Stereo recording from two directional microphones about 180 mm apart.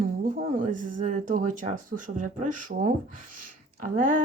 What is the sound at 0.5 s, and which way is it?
Speech, 45° right (ahead or behind).